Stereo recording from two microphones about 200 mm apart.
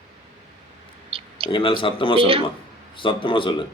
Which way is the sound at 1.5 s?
25° left (ahead or behind).